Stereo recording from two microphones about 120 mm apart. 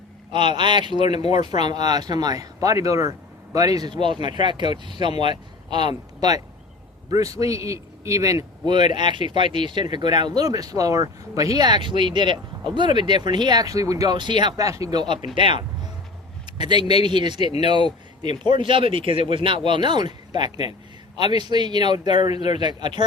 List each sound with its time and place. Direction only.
0.3 s speech: 40° right (ahead or behind)
1.0 s speech: 65° left (ahead or behind)
1.4 s a man's voice: 35° right (ahead or behind)
8.7 s speech: 40° right (ahead or behind)